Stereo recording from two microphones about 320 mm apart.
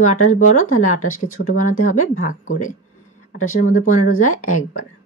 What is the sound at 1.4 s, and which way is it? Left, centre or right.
Speech, left.